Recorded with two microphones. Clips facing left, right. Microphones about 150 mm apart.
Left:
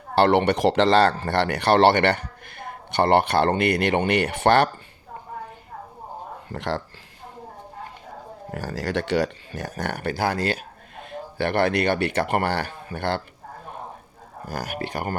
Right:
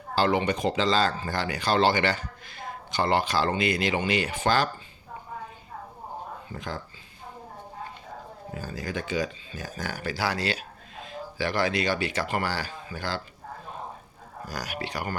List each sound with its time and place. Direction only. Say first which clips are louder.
0.2 s speech: left 6 dB; 70° left (ahead or behind)
6.5 s speech: left 9 dB; 75° left (ahead or behind)
8.5 s speech: left 7 dB; 80° left; by 13.2 s 60° left (ahead or behind)
14.4 s speech: left 4 dB; 50° left (ahead or behind)